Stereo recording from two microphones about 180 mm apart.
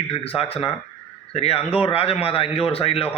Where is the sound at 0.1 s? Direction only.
35° left (ahead or behind).